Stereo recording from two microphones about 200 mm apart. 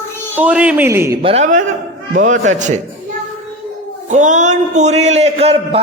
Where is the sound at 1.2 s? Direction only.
30° right (ahead or behind).